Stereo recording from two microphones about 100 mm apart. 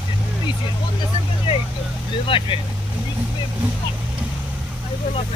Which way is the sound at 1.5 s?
55° left (ahead or behind).